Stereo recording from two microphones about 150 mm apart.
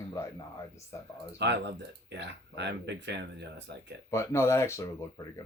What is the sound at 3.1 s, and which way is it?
Speech, 90° right.